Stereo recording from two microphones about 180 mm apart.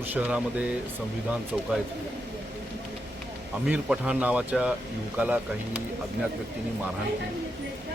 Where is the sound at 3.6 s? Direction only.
5° right (ahead or behind).